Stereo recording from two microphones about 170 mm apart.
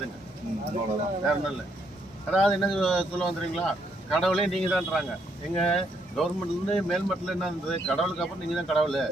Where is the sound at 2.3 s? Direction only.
Centre (ahead or behind).